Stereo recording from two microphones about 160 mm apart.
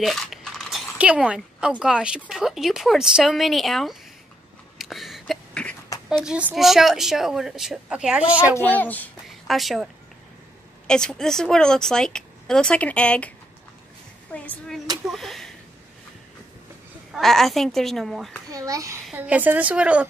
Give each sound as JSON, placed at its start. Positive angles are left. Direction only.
{"t": 0.0, "sound": "speech", "side_deg": 0}
{"t": 4.7, "sound": "a sound", "side_deg": 0}
{"t": 6.0, "sound": "speech", "side_deg": -5}
{"t": 8.5, "sound": "a child's voice", "side_deg": 10}
{"t": 9.5, "sound": "speech", "side_deg": 0}
{"t": 10.9, "sound": "speech", "side_deg": 5}
{"t": 14.3, "sound": "speech", "side_deg": 10}
{"t": 15.0, "sound": "a sound", "side_deg": 0}
{"t": 17.1, "sound": "speech", "side_deg": 0}
{"t": 18.5, "sound": "a child's voice", "side_deg": -20}
{"t": 19.1, "sound": "a woman's voice", "side_deg": -10}